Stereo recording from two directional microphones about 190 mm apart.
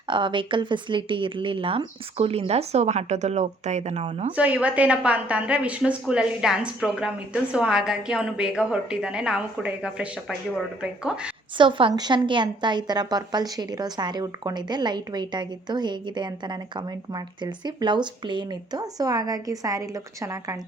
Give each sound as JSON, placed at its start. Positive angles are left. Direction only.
{"t": 0.1, "sound": "speech", "side_deg": -25}
{"t": 4.4, "sound": "a woman's voice", "side_deg": -5}
{"t": 11.5, "sound": "a woman's voice", "side_deg": -25}